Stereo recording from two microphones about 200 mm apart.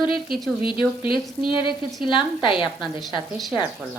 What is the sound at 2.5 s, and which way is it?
Speech, centre (ahead or behind).